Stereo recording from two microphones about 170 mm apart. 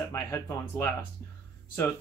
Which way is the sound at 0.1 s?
15° left (ahead or behind).